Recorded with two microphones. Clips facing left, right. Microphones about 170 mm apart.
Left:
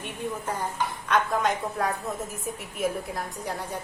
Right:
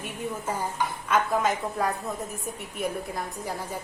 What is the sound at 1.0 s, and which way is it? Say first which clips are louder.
A woman's voice: even; 5° right (ahead or behind).